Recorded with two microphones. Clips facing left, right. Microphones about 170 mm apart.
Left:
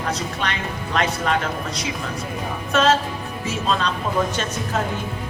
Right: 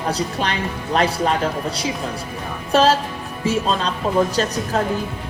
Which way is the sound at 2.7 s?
30° right (ahead or behind).